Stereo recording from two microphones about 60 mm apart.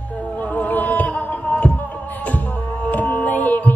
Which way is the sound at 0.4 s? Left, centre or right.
Left.